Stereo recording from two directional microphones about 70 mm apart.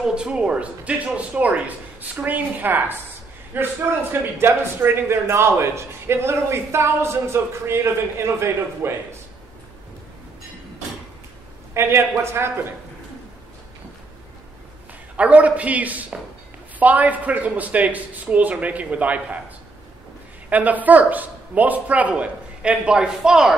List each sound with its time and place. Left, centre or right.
0.0 s a man's voice: centre; by 8.9 s right
11.7 s a man's voice: right
15.1 s a man's voice: right
20.4 s a man's voice: right